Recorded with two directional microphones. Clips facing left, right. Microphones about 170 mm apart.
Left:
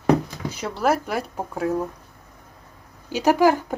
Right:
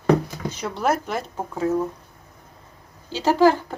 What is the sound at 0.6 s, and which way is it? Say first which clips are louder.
Speech: left 1 dB; 5° left (ahead or behind).